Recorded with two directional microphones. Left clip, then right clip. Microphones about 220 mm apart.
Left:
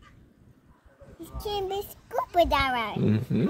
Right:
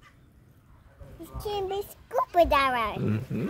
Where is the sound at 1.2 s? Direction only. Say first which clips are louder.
Even; 15° left (ahead or behind).